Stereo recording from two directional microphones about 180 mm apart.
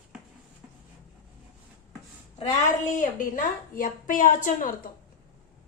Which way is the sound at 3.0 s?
50° left (ahead or behind).